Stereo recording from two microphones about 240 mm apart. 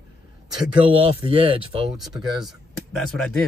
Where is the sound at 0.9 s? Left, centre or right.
Right.